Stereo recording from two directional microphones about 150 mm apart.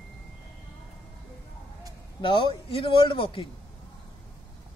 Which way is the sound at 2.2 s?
35° left (ahead or behind).